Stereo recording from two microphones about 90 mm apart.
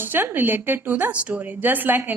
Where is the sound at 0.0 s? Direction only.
20° right (ahead or behind).